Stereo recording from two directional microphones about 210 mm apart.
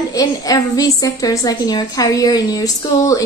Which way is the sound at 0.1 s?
15° left (ahead or behind).